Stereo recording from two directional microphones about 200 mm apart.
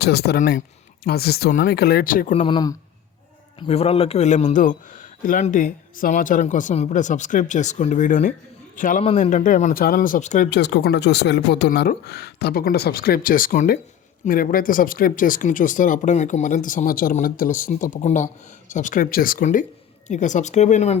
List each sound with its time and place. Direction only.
0.0 s speech: 55° left (ahead or behind)
2.3 s a man's voice: 25° left (ahead or behind)
10.5 s a man's voice: 55° left (ahead or behind); by 21.0 s 35° left (ahead or behind)